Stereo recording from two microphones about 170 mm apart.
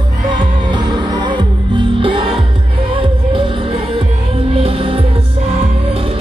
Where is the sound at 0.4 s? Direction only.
25° right (ahead or behind).